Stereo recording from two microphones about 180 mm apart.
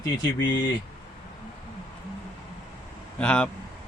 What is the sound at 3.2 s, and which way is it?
Speech, 5° left (ahead or behind).